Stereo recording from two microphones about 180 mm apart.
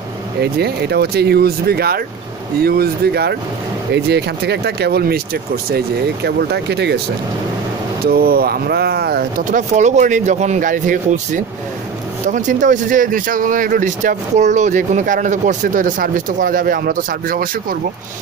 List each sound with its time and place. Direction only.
0.4 s speech: 65° right (ahead or behind)
8.0 s speech: 55° right (ahead or behind)
9.5 s speech: 45° right (ahead or behind)